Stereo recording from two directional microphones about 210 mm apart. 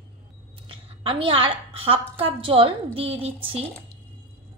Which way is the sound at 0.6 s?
25° right (ahead or behind).